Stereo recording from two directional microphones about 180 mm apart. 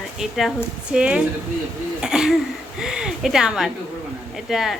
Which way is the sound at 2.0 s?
5° right (ahead or behind).